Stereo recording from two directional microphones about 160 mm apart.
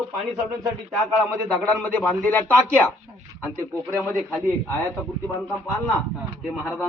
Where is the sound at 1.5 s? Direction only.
5° left (ahead or behind).